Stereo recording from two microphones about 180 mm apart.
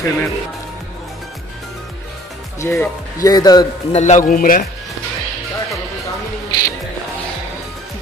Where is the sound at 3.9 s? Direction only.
40° left (ahead or behind).